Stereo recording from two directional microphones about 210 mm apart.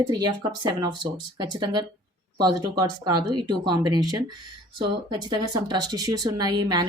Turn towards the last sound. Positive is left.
turn(degrees=-20)  # may be behind; listen again after turning